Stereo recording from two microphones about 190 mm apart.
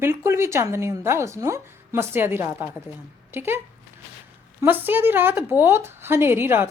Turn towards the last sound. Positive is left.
turn(degrees=-10)  # may be behind; listen again after turning